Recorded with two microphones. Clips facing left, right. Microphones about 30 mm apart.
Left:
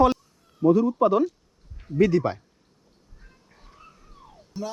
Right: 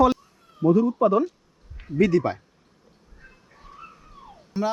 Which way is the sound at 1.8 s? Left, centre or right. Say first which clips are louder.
Right 2 dB; right.